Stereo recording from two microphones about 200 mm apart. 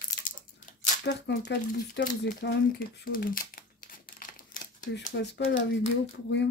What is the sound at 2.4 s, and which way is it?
Crumpling, 55° left (ahead or behind).